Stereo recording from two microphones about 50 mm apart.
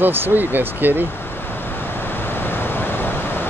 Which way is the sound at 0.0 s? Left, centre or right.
Right.